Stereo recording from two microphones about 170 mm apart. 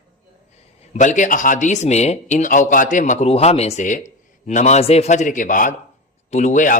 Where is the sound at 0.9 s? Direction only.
45° left (ahead or behind).